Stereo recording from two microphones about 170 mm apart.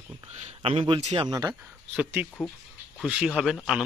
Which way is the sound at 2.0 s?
10° right (ahead or behind).